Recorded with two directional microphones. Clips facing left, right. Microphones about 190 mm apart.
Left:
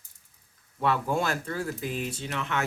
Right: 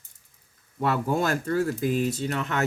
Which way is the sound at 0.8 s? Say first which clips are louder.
Right 2 dB; 40° right (ahead or behind).